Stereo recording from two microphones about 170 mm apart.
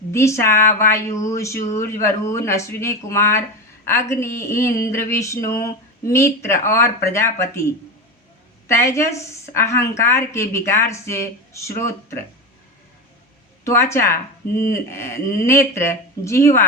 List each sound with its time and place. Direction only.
0.1 s a woman's voice: 15° left (ahead or behind)
13.7 s a woman's voice: 15° left (ahead or behind)